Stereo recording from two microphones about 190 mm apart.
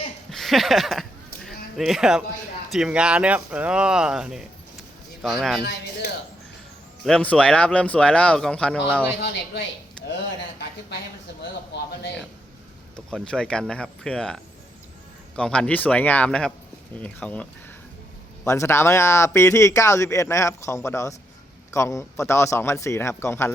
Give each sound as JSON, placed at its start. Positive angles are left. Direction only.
{"t": 0.3, "sound": "a sound", "side_deg": 0}
{"t": 2.7, "sound": "speech", "side_deg": -5}
{"t": 5.6, "sound": "speech", "side_deg": 60}
{"t": 7.0, "sound": "speech", "side_deg": 5}
{"t": 13.1, "sound": "speech", "side_deg": 5}